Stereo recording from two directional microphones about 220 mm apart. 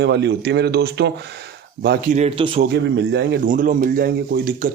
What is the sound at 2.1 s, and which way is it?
Speech, 25° right (ahead or behind).